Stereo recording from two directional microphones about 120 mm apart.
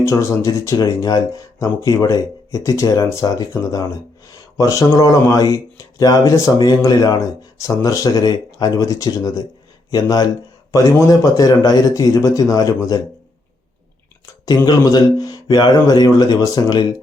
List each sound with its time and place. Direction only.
0.0 s speech: 25° left (ahead or behind)
14.4 s speech: 30° left (ahead or behind)